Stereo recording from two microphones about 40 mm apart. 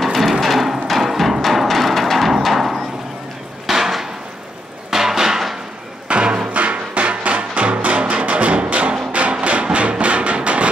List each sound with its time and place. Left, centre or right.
0.0 s music: centre
3.6 s a sound: centre
6.0 s music: right